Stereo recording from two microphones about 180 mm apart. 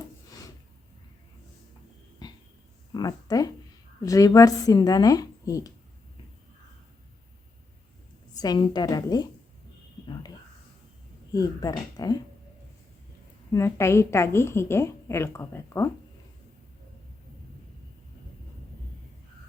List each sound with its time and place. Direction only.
2.2 s dog: 20° left (ahead or behind)
2.9 s speech: 20° left (ahead or behind)
8.4 s speech: 25° left (ahead or behind)
11.3 s speech: 20° left (ahead or behind)
13.5 s a woman's voice: 15° left (ahead or behind)